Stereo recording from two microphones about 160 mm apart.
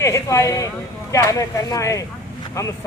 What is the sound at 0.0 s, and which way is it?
Speech, 20° left (ahead or behind).